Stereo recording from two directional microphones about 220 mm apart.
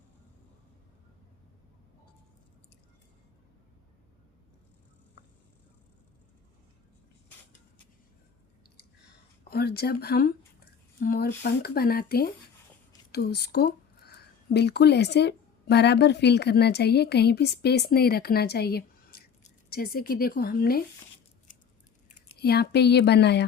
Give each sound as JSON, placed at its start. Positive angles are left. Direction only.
{"t": 9.4, "sound": "a sound", "side_deg": 45}
{"t": 11.0, "sound": "speech", "side_deg": 40}
{"t": 22.4, "sound": "speech", "side_deg": 45}